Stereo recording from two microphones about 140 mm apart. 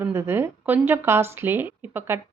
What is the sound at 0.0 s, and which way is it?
Speech, 15° right (ahead or behind).